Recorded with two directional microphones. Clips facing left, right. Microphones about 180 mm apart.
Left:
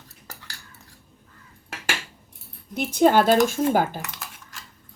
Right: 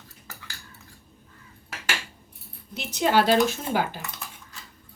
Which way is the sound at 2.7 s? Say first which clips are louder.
Left 5 dB; 50° left (ahead or behind).